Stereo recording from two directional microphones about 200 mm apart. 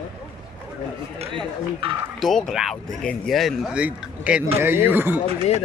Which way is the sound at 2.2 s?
Centre (ahead or behind).